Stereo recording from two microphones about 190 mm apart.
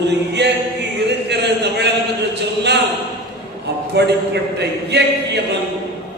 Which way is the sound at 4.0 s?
60° right (ahead or behind).